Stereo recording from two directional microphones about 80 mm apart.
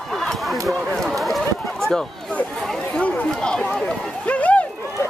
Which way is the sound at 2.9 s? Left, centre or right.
Centre.